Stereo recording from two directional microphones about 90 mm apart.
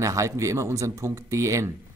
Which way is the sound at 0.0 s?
35° right (ahead or behind).